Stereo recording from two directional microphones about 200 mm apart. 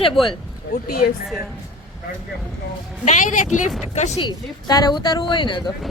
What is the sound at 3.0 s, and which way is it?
A woman's voice, 40° left (ahead or behind).